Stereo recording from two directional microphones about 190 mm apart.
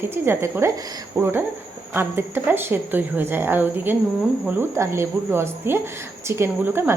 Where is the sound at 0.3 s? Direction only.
15° right (ahead or behind).